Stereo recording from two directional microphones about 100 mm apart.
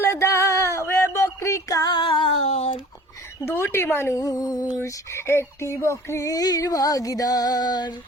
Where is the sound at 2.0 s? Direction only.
60° left (ahead or behind); by 2.7 s 90° left.